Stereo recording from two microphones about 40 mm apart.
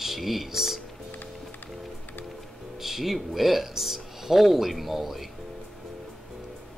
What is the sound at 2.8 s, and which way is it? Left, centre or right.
Speech, centre.